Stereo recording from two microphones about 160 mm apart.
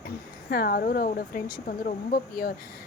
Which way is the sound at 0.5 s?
70° left (ahead or behind).